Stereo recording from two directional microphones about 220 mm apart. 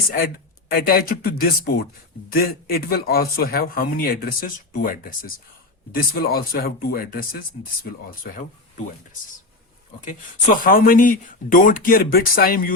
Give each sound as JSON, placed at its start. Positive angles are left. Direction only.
{"t": 0.7, "sound": "speech", "side_deg": 45}
{"t": 10.0, "sound": "speech", "side_deg": 35}